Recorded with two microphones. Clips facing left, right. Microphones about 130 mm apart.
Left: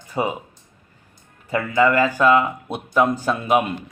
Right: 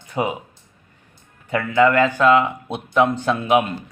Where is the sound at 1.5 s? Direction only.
5° left (ahead or behind).